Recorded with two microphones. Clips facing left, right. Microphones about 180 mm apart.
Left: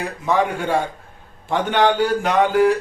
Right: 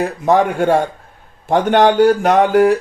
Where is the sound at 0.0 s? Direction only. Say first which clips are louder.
Right 6 dB; 45° right (ahead or behind).